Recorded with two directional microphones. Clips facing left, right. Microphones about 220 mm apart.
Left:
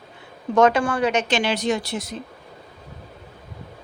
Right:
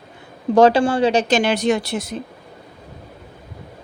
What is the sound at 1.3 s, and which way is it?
Speech, 50° right (ahead or behind).